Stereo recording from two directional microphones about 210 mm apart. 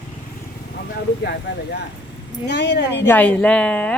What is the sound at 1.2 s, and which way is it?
Speech, 50° left (ahead or behind).